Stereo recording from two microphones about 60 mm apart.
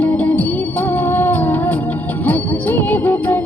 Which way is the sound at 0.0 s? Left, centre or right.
Left.